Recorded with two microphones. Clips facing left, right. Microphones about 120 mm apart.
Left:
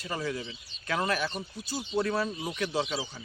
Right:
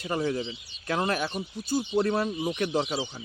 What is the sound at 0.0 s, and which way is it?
Speech, 45° right (ahead or behind).